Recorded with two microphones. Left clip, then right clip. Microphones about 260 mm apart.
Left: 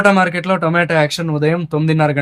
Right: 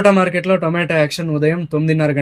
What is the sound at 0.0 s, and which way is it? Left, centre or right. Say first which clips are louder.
Speech: even; centre.